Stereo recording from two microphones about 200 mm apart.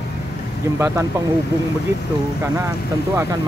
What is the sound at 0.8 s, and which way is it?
Speech, 15° right (ahead or behind).